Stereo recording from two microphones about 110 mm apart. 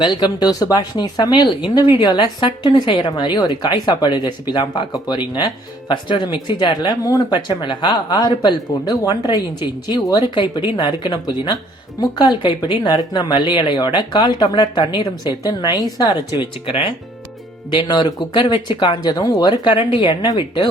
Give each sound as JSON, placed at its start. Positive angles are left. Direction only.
{"t": 0.0, "sound": "a woman's voice", "side_deg": 40}